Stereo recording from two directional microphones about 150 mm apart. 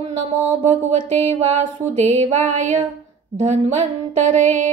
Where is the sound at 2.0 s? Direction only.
50° right (ahead or behind).